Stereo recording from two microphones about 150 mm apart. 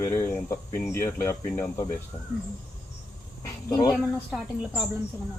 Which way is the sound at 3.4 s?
20° left (ahead or behind).